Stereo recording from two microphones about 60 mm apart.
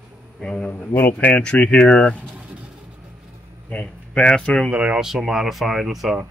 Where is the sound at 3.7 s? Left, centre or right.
Centre.